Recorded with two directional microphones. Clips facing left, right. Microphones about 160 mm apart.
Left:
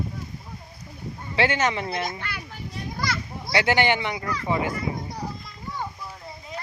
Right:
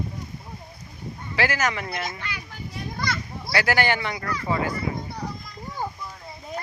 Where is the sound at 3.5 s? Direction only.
20° left (ahead or behind).